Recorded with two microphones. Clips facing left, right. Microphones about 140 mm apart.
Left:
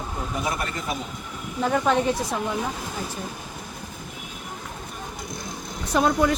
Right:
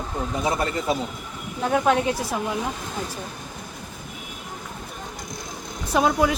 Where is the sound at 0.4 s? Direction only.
30° right (ahead or behind).